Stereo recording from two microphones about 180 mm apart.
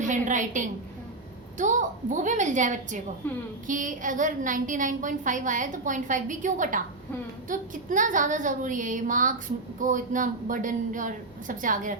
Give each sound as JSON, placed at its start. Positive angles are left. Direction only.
{"t": 0.0, "sound": "a woman's voice", "side_deg": -45}
{"t": 3.2, "sound": "a woman's voice", "side_deg": 10}
{"t": 3.7, "sound": "a woman's voice", "side_deg": -45}